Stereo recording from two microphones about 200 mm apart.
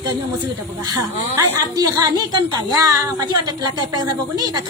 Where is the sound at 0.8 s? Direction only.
20° right (ahead or behind).